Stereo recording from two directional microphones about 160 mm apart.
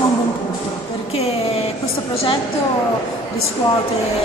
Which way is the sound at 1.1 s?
40° left (ahead or behind).